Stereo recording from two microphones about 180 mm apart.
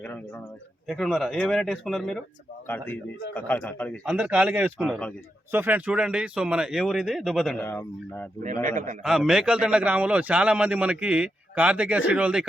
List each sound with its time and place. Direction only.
0.0 s a man's voice: 10° left (ahead or behind)
4.0 s a man's voice: 5° right (ahead or behind)
4.8 s speech: 5° left (ahead or behind)
5.5 s speech: 10° right (ahead or behind)
7.7 s a man's voice: 15° left (ahead or behind)
8.6 s a man's voice: 45° right (ahead or behind)
9.0 s a man's voice: centre (ahead or behind)